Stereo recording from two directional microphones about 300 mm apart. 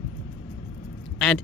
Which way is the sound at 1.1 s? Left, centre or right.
Centre.